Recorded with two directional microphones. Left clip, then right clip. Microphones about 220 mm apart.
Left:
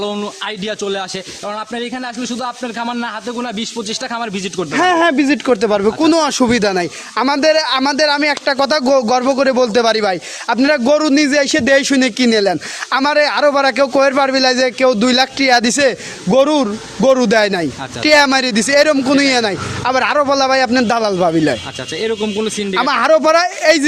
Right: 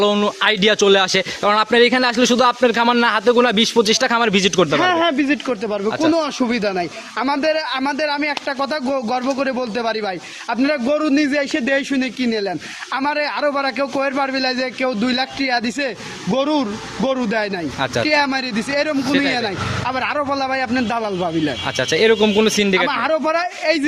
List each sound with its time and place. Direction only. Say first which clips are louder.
0.0 s speech: right 6 dB; 25° right (ahead or behind)
4.7 s speech: left 3 dB; 45° left (ahead or behind)
21.9 s speech: right 4 dB; 25° right (ahead or behind)
22.8 s speech: left 6 dB; 50° left (ahead or behind)